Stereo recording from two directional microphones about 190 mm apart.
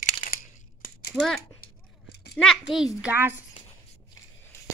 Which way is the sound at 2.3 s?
Centre (ahead or behind).